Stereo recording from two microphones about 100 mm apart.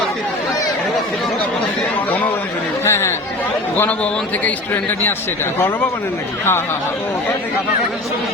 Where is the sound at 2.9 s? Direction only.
25° left (ahead or behind).